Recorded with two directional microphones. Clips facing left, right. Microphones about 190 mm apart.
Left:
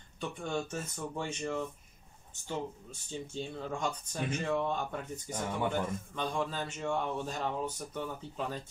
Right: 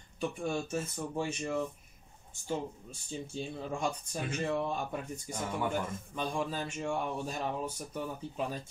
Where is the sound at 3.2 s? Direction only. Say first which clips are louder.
Even; 10° right (ahead or behind).